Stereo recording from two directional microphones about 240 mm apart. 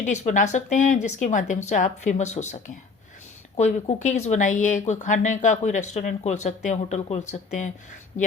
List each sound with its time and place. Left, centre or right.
0.0 s speech: left